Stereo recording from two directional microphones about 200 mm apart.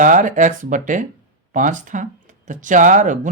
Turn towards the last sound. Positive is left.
turn(degrees=-40)  # may be behind; listen again after turning